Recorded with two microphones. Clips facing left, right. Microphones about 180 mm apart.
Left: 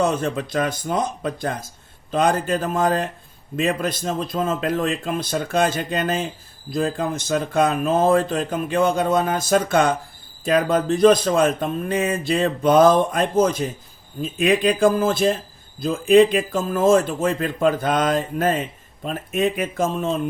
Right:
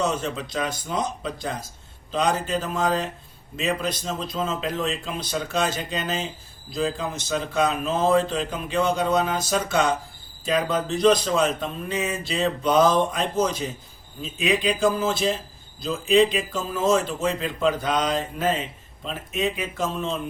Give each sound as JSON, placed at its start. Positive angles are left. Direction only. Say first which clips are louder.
{"t": 0.0, "sound": "speech", "louder": "left 5 dB", "side_deg": 55}